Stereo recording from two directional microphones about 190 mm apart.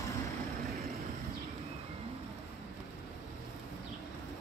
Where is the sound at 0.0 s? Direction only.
15° left (ahead or behind).